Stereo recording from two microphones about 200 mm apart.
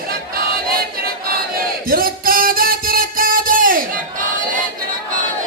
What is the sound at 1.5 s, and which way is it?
Battle cry, 45° right (ahead or behind).